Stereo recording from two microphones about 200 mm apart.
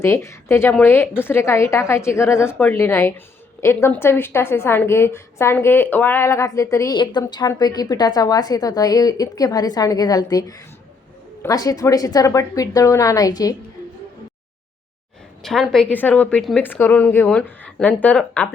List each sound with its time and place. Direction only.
0.0 s a woman's voice: 15° left (ahead or behind)
15.4 s a woman's voice: centre (ahead or behind)